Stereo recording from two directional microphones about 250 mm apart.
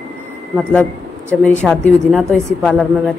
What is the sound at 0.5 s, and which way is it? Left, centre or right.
Speech, centre.